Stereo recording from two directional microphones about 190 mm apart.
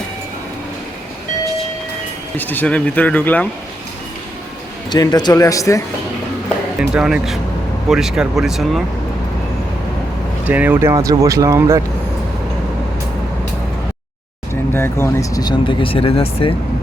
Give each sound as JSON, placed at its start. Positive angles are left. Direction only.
{"t": 2.3, "sound": "speech", "side_deg": 10}
{"t": 4.9, "sound": "speech", "side_deg": 20}
{"t": 6.7, "sound": "speech", "side_deg": -5}
{"t": 10.4, "sound": "speech", "side_deg": -10}
{"t": 14.7, "sound": "speech", "side_deg": 15}